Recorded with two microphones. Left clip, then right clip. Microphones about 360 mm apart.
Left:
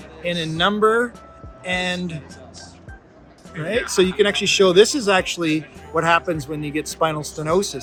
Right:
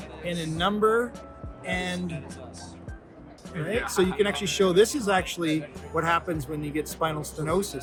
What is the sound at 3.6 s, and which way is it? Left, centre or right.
Speech, left.